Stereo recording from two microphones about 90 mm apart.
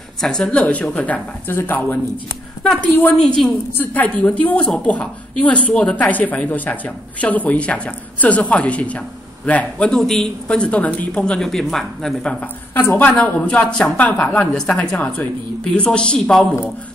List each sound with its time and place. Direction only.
0.2 s a woman's voice: 5° left (ahead or behind); by 3.2 s 20° left (ahead or behind)
3.2 s a woman's voice: 5° left (ahead or behind)
3.7 s a woman's voice: 20° left (ahead or behind)
12.7 s a woman's voice: 20° left (ahead or behind)